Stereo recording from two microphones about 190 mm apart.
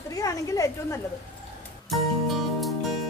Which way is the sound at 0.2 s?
15° left (ahead or behind).